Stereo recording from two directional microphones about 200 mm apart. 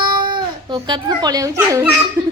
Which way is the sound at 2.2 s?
15° right (ahead or behind).